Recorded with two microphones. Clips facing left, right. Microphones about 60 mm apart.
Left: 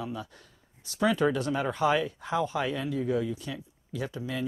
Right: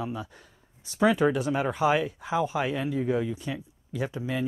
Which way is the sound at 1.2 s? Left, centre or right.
Centre.